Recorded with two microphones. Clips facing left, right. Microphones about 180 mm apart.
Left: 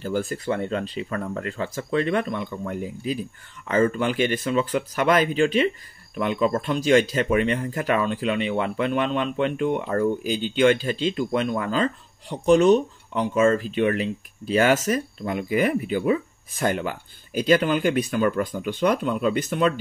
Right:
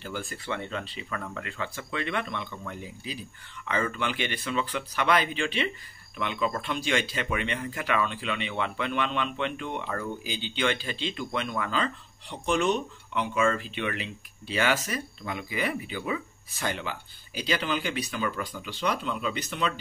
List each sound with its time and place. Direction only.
0.0 s speech: 40° left (ahead or behind)